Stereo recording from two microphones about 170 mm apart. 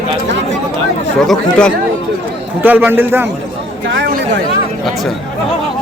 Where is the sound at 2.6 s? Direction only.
10° right (ahead or behind).